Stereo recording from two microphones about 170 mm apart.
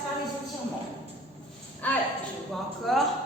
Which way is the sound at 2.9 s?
Centre (ahead or behind).